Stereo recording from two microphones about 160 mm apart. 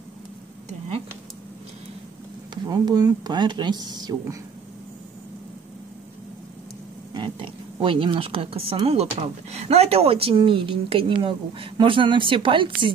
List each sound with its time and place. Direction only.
0.7 s a sound: 35° right (ahead or behind)
2.5 s speech: 25° right (ahead or behind)
7.2 s speech: 30° right (ahead or behind)